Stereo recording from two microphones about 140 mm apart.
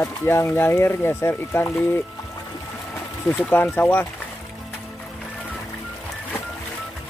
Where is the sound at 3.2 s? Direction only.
15° left (ahead or behind).